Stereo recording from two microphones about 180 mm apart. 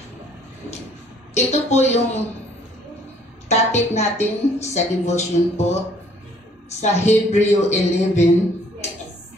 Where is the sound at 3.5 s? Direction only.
40° left (ahead or behind).